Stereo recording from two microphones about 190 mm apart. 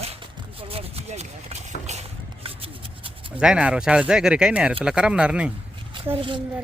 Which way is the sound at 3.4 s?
5° right (ahead or behind).